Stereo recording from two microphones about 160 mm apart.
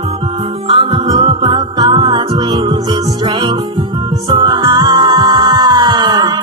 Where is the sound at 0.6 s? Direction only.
35° right (ahead or behind).